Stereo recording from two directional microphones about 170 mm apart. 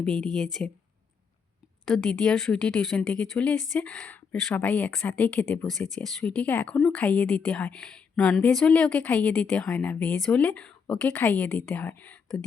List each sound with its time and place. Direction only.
0.0 s a woman's voice: 5° left (ahead or behind)
2.0 s speech: 5° left (ahead or behind)